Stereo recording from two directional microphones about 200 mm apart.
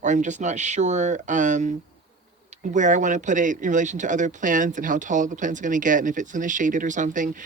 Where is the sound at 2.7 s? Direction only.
40° right (ahead or behind).